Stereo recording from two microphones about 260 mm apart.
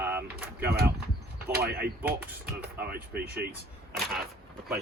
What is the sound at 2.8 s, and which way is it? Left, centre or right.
Speech, right.